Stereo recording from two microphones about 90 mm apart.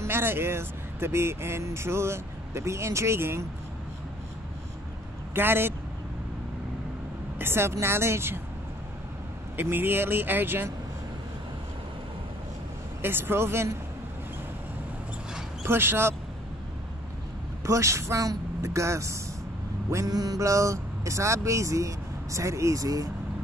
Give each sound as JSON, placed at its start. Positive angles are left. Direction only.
{"t": 0.0, "sound": "speech", "side_deg": -25}
{"t": 5.3, "sound": "speech", "side_deg": -25}
{"t": 7.3, "sound": "speech", "side_deg": -25}
{"t": 9.6, "sound": "speech", "side_deg": -25}
{"t": 13.0, "sound": "speech", "side_deg": -25}
{"t": 15.6, "sound": "speech", "side_deg": -25}
{"t": 17.6, "sound": "speech", "side_deg": -35}